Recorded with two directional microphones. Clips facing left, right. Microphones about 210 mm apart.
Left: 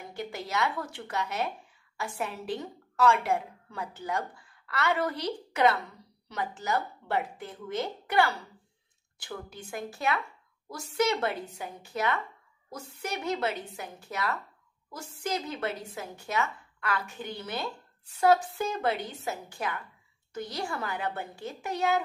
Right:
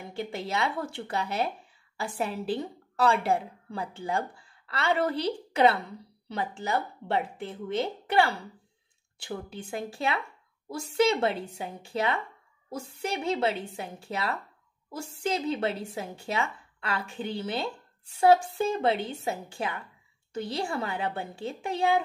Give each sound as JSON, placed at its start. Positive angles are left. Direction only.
{"t": 0.1, "sound": "a woman's voice", "side_deg": -30}